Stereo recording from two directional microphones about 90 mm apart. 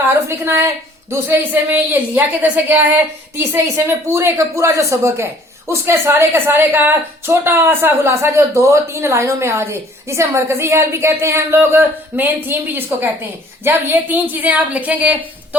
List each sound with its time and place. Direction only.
0.1 s a woman's voice: 25° right (ahead or behind)
4.1 s a woman's voice: 30° right (ahead or behind)